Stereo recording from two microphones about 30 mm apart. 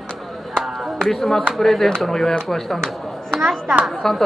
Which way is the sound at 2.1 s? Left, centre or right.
Centre.